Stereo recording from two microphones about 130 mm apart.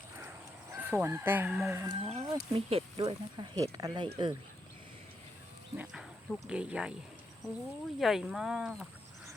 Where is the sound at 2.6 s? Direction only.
50° right (ahead or behind).